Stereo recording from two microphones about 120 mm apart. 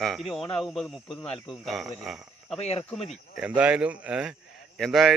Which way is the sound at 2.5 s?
60° left (ahead or behind).